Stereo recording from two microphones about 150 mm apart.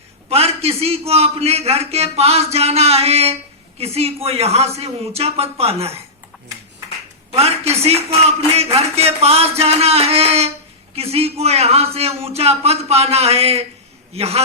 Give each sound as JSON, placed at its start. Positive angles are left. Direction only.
{"t": 0.3, "sound": "a man's voice", "side_deg": -45}
{"t": 7.3, "sound": "a sound", "side_deg": -45}
{"t": 7.9, "sound": "a man's voice", "side_deg": -45}